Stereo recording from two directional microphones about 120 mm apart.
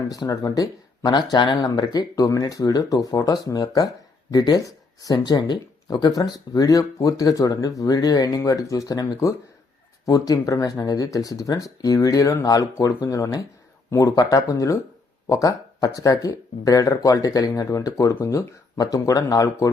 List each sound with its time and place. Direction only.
0.1 s speech: 30° left (ahead or behind)